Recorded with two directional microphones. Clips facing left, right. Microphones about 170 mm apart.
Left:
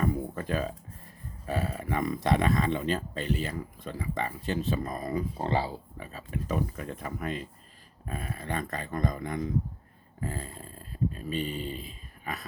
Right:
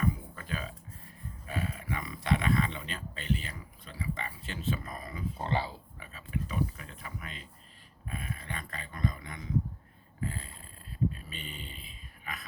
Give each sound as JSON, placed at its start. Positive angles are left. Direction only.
{"t": 0.3, "sound": "speech", "side_deg": 40}